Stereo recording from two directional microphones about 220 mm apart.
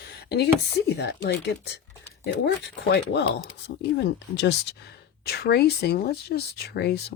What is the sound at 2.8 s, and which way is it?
Speech, 50° left (ahead or behind).